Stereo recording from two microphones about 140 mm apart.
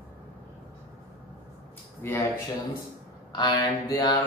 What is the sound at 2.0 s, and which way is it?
Speech, 15° left (ahead or behind).